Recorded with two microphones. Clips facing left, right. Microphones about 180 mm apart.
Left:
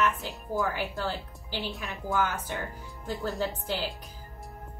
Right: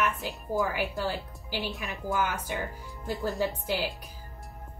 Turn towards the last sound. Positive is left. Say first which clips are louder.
# right 2 dB
turn(degrees=-15)  # may be behind; listen again after turning